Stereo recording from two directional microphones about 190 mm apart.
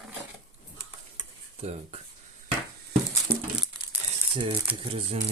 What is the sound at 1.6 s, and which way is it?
Speech, 35° right (ahead or behind).